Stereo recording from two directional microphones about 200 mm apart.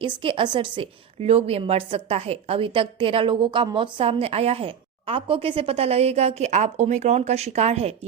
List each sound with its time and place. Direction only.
0.0 s a woman's voice: 25° right (ahead or behind)